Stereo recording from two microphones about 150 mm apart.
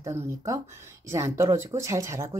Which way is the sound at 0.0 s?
20° right (ahead or behind).